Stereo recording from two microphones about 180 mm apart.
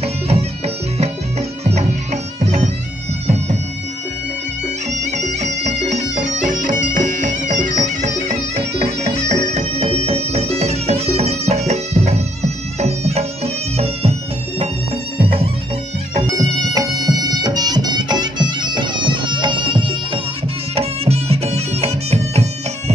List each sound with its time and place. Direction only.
0.0 s music: 35° right (ahead or behind)
2.4 s bagpipes: 40° right (ahead or behind)
5.1 s music: 40° right (ahead or behind)
15.1 s music: 30° right (ahead or behind)
16.3 s music: 20° right (ahead or behind); by 22.5 s 35° right (ahead or behind)